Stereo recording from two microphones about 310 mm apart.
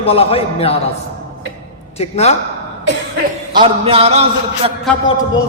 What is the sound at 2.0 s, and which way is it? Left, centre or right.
Speech, left.